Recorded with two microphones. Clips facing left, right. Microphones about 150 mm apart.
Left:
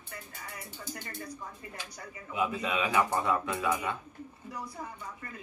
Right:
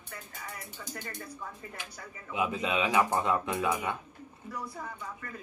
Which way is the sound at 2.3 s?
20° right (ahead or behind).